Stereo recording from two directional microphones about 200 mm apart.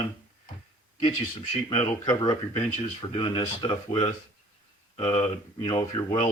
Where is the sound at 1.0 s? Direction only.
25° left (ahead or behind).